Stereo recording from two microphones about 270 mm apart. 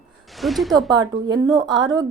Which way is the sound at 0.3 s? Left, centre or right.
Centre.